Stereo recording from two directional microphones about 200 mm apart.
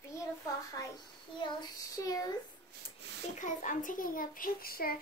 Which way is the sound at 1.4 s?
20° left (ahead or behind).